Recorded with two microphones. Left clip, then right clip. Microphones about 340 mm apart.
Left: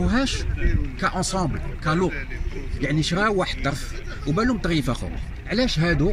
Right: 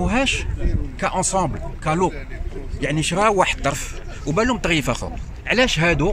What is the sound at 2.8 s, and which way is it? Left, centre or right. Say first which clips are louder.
Speech: right 3 dB; centre.